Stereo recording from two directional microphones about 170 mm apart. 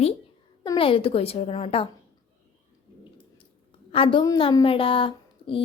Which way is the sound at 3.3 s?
30° left (ahead or behind).